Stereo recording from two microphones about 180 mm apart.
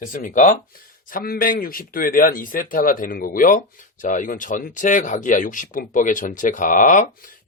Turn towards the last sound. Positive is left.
turn(degrees=45)  # may be behind; listen again after turning